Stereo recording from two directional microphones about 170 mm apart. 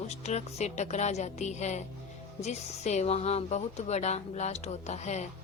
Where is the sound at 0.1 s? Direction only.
40° left (ahead or behind).